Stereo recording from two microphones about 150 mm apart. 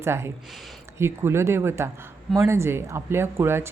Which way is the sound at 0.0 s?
15° right (ahead or behind).